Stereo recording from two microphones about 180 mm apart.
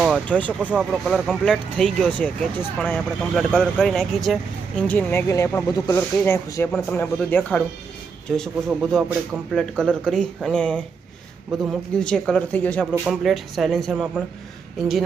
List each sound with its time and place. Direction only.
0.3 s speech: 5° left (ahead or behind)
0.6 s speech: 5° right (ahead or behind)